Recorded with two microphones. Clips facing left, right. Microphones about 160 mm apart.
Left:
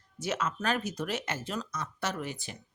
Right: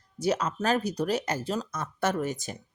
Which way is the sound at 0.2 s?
35° right (ahead or behind).